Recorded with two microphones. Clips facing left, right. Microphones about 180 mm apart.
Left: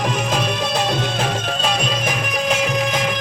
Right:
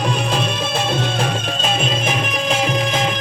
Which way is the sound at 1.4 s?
25° right (ahead or behind).